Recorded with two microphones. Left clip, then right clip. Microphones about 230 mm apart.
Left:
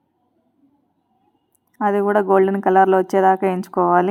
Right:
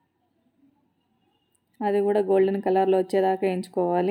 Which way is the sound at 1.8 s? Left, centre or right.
Left.